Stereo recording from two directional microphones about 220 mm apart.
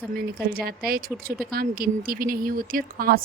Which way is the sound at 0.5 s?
45° right (ahead or behind).